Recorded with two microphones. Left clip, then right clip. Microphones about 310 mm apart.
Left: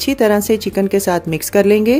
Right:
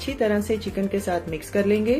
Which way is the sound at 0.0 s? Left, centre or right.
Left.